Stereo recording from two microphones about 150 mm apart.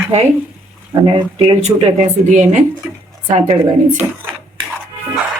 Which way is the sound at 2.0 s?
55° right (ahead or behind).